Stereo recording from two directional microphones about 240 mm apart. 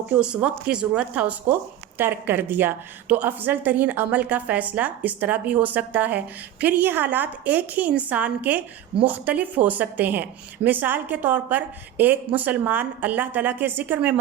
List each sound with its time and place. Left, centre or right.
0.1 s a woman's voice: centre